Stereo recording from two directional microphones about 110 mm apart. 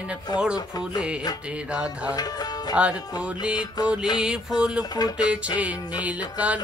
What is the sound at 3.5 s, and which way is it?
Speech, 40° left (ahead or behind).